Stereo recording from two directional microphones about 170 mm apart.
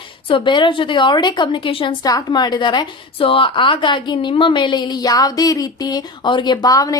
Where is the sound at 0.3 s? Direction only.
30° left (ahead or behind).